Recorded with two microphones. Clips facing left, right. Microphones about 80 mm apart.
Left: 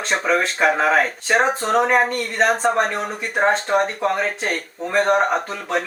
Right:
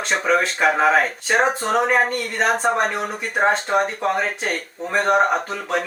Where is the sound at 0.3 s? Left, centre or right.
Centre.